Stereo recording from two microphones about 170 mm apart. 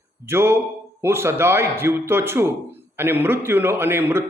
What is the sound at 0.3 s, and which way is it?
A man's voice, 15° right (ahead or behind).